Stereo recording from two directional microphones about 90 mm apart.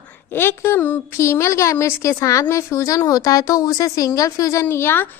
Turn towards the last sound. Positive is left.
turn(degrees=25)  # may be behind; listen again after turning